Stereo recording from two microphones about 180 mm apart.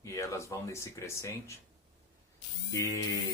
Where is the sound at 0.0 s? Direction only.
15° left (ahead or behind).